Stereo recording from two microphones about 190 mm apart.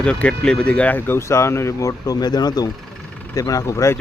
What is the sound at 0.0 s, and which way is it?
Speech, 5° left (ahead or behind).